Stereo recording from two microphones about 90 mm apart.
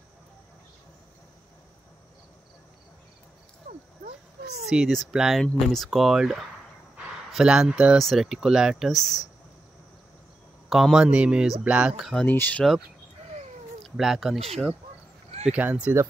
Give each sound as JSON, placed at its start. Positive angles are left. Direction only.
{"t": 4.6, "sound": "speech", "side_deg": -5}
{"t": 10.7, "sound": "speech", "side_deg": -5}
{"t": 12.3, "sound": "speech", "side_deg": 20}
{"t": 13.8, "sound": "speech", "side_deg": 0}
{"t": 15.4, "sound": "speech", "side_deg": -15}